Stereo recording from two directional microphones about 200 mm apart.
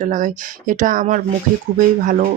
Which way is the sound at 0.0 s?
40° right (ahead or behind).